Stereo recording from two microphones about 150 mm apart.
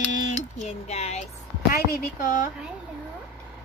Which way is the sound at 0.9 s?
45° left (ahead or behind).